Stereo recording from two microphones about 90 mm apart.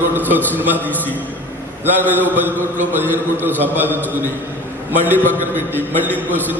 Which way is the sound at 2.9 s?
20° right (ahead or behind).